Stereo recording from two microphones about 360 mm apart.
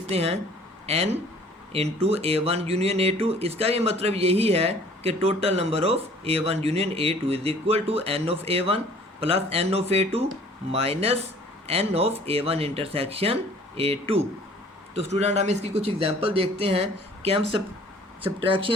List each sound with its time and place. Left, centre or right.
0.1 s speech: centre